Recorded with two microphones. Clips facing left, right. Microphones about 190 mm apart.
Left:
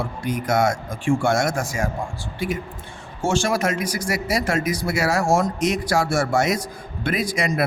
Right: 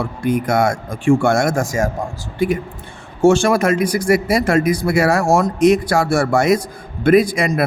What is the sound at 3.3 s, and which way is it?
Speech, 60° right (ahead or behind).